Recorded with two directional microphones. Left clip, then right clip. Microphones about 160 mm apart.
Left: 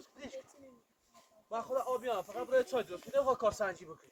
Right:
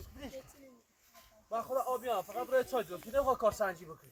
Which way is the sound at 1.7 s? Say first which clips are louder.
Even; 20° right (ahead or behind).